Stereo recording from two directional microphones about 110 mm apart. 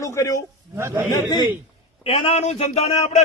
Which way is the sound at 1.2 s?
35° left (ahead or behind).